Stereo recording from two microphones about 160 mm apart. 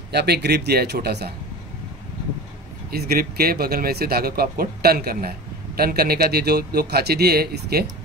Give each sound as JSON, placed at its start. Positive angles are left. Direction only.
{"t": 0.1, "sound": "speech", "side_deg": -90}
{"t": 2.9, "sound": "a man's voice", "side_deg": -75}